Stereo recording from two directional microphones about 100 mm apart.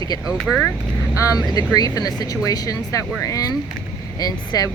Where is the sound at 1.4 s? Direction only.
40° left (ahead or behind).